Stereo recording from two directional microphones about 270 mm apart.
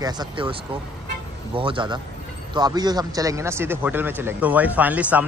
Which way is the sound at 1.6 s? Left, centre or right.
Centre.